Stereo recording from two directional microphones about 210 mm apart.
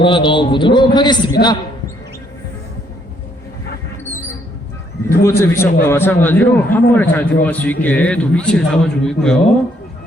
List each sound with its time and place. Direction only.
0.0 s a man's voice: 25° left (ahead or behind)
5.0 s a man's voice: 10° left (ahead or behind)